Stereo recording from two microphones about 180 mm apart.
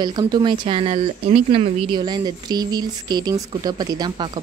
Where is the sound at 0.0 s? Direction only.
25° right (ahead or behind).